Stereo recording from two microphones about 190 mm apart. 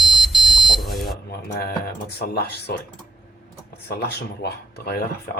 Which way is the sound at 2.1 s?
60° left (ahead or behind).